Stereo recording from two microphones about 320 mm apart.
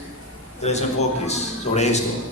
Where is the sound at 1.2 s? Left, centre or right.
Left.